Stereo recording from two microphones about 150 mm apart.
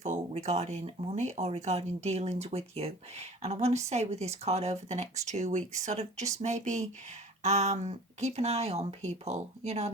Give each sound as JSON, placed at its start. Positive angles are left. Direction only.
{"t": 0.0, "sound": "speech", "side_deg": -50}